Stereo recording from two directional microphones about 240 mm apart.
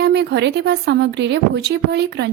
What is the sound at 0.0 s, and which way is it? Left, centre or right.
A woman's voice, right.